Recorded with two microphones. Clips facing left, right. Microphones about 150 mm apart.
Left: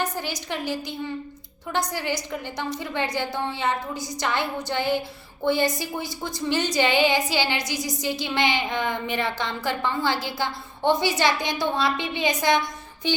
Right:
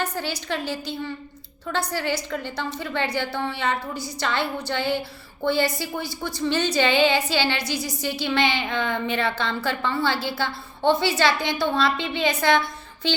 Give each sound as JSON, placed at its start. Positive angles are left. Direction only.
{"t": 0.0, "sound": "a woman's voice", "side_deg": 15}